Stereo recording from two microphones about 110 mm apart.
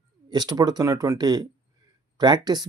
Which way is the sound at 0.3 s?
40° right (ahead or behind).